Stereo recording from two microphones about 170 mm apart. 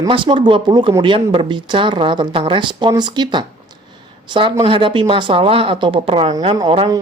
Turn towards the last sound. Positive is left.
turn(degrees=-30)  # may be behind; listen again after turning